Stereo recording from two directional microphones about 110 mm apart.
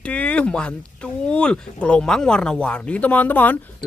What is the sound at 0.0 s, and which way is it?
Speech, 10° left (ahead or behind).